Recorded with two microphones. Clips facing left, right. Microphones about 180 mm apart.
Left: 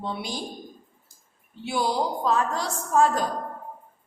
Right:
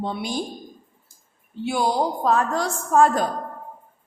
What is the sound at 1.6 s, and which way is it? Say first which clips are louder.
A woman's voice: right 3 dB; 50° right (ahead or behind).